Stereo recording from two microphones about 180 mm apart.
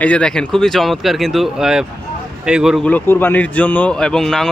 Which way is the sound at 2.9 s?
10° left (ahead or behind).